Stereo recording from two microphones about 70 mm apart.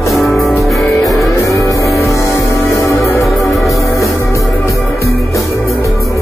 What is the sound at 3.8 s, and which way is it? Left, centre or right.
Music, left.